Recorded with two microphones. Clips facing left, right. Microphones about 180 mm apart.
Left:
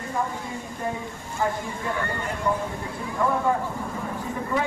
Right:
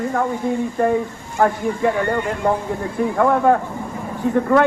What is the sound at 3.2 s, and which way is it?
Speech, 70° right (ahead or behind).